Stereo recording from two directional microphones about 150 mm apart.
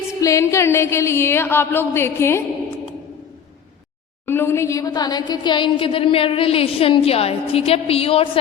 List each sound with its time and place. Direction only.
0.2 s a woman's voice: 20° left (ahead or behind)
4.3 s a woman's voice: 15° left (ahead or behind); by 8.3 s 40° left (ahead or behind)